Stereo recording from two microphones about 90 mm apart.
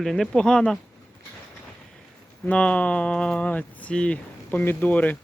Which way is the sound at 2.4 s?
15° left (ahead or behind).